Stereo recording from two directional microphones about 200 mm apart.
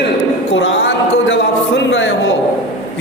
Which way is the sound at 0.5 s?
65° left (ahead or behind).